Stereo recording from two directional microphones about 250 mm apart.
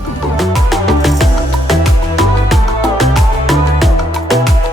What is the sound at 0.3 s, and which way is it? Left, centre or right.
Music, centre.